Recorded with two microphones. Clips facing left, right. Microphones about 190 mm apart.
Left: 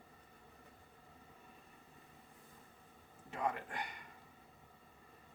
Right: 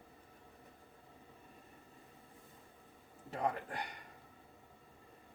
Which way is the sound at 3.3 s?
35° right (ahead or behind).